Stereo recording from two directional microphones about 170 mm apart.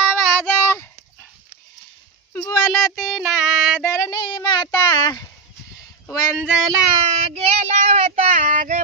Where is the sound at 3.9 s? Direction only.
20° left (ahead or behind).